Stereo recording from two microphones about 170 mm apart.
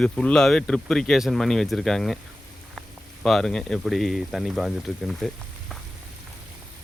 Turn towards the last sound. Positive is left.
turn(degrees=0)  # may be behind; listen again after turning